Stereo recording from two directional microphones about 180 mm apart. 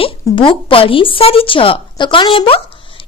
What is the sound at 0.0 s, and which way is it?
A woman's voice, 30° left (ahead or behind).